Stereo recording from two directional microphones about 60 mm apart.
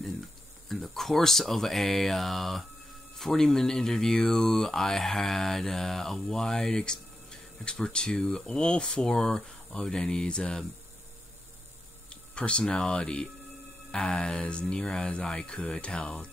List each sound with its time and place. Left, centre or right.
0.7 s speech: centre
12.1 s speech: centre